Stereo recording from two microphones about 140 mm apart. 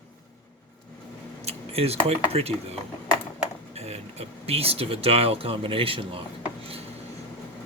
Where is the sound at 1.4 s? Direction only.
45° right (ahead or behind).